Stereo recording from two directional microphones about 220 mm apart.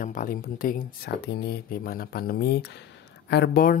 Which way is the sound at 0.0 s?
40° left (ahead or behind).